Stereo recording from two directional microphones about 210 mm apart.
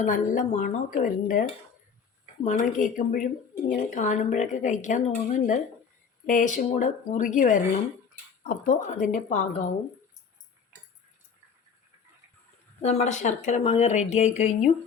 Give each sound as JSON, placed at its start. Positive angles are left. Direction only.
{"t": 0.0, "sound": "speech", "side_deg": 35}
{"t": 12.8, "sound": "speech", "side_deg": 30}